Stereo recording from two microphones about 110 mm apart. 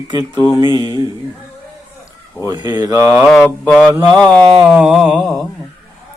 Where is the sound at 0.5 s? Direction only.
30° right (ahead or behind).